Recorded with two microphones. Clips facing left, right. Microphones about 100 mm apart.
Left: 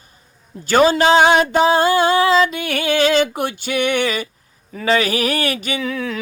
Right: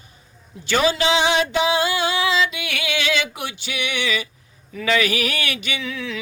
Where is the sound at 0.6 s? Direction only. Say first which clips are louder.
Left 6 dB; 45° left (ahead or behind).